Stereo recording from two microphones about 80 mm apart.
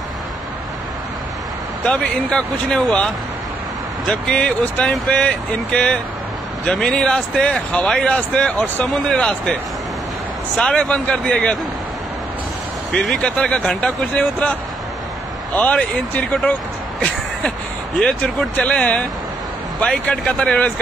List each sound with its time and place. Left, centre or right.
1.9 s speech: centre
4.1 s speech: centre
8.8 s speech: centre
10.6 s speech: centre
12.9 s speech: centre
15.5 s speech: centre
17.9 s speech: centre